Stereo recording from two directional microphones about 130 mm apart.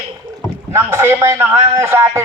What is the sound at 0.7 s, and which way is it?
Speech, 20° right (ahead or behind).